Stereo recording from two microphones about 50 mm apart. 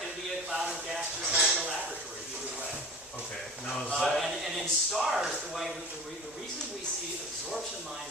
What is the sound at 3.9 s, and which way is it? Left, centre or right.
Speech, centre.